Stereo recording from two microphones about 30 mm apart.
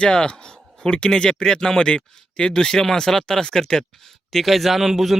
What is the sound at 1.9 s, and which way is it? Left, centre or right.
Speech, left.